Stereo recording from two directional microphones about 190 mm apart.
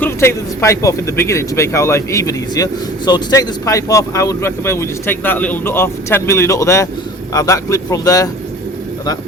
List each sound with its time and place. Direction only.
0.0 s speech: 15° left (ahead or behind)